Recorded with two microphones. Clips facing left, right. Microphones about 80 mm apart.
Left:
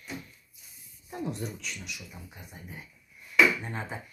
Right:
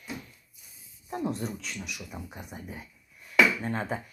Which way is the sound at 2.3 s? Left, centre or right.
Right.